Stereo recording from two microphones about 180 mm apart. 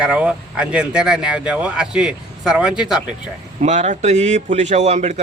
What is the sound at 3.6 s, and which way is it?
Speech, 40° right (ahead or behind).